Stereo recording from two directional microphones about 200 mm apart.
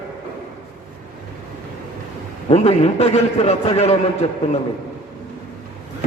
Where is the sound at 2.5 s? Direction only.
30° left (ahead or behind).